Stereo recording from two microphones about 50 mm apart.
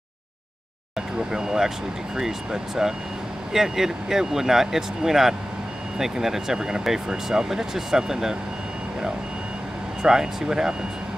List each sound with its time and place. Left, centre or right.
1.1 s speech: centre
10.0 s speech: centre